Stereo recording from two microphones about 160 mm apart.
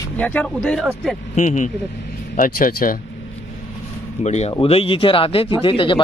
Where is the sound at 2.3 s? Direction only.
60° left (ahead or behind).